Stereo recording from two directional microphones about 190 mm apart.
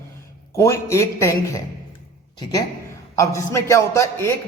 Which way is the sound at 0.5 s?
15° left (ahead or behind).